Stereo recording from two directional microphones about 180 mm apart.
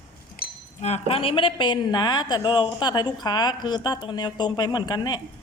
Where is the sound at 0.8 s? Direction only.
35° left (ahead or behind).